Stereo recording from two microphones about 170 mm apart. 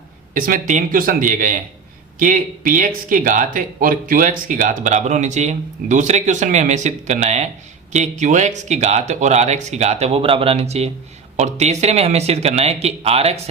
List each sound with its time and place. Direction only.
0.3 s speech: 50° right (ahead or behind); by 13.4 s 35° right (ahead or behind)